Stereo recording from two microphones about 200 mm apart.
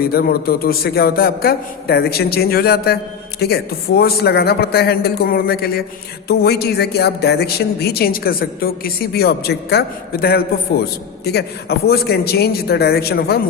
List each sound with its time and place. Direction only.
0.0 s speech: 50° left (ahead or behind)